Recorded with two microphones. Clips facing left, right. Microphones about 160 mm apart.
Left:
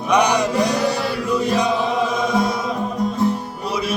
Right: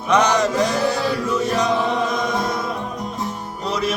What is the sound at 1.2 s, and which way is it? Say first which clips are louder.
Chant: left 1 dB; 15° left (ahead or behind).